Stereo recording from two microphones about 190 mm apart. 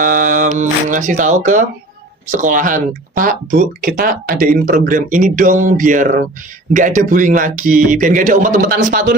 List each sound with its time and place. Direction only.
0.0 s speech: 45° right (ahead or behind)